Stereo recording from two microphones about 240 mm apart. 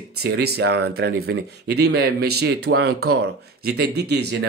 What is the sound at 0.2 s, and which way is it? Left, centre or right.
Speech, right.